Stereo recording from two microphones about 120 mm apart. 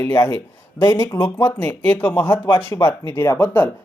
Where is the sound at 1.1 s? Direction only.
20° left (ahead or behind).